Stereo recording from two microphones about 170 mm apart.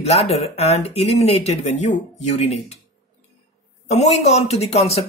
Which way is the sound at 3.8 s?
40° left (ahead or behind).